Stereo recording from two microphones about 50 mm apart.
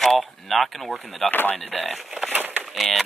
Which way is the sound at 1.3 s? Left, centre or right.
Left.